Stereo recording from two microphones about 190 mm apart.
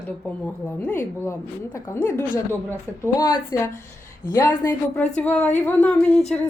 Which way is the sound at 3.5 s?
20° left (ahead or behind).